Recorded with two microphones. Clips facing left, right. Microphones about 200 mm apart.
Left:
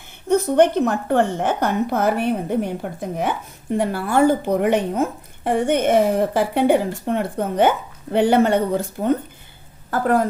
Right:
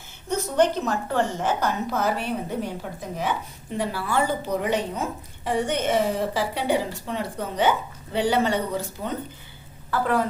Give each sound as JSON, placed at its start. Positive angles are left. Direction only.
{"t": 0.3, "sound": "a woman's voice", "side_deg": 55}